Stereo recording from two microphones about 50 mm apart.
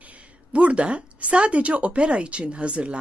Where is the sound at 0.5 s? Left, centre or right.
Right.